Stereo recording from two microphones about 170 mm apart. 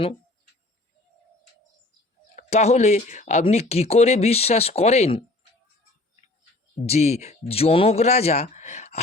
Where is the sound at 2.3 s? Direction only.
40° left (ahead or behind).